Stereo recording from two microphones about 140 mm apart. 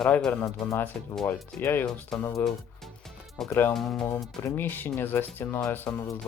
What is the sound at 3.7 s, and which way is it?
Speech, centre (ahead or behind).